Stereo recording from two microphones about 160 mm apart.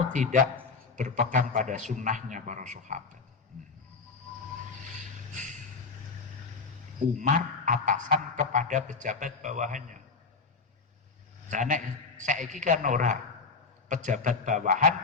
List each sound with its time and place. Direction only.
0.1 s a man's voice: 50° right (ahead or behind)
5.3 s a sound: 50° right (ahead or behind)
7.0 s speech: 50° right (ahead or behind)
11.5 s speech: 50° right (ahead or behind)